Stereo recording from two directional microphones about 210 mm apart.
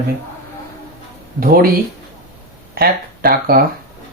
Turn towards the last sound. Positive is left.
turn(degrees=-45)  # may be behind; listen again after turning